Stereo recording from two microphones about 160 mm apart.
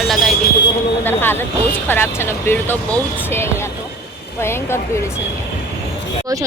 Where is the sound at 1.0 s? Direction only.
15° left (ahead or behind).